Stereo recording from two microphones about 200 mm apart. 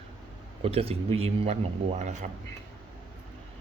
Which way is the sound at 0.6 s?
30° right (ahead or behind).